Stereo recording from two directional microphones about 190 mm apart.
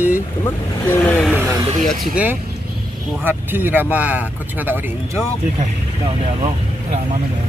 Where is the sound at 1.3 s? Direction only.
10° right (ahead or behind).